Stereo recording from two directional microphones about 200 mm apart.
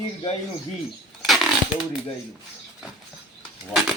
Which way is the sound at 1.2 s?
Centre (ahead or behind).